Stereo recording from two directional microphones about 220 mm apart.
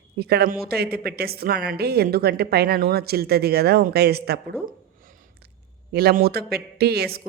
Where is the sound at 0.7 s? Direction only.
45° right (ahead or behind).